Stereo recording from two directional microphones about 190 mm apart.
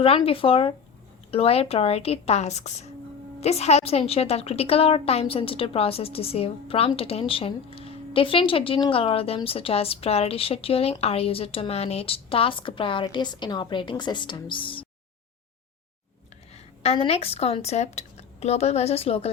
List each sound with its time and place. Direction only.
0.0 s a woman's voice: 30° left (ahead or behind)
16.8 s speech: 30° left (ahead or behind)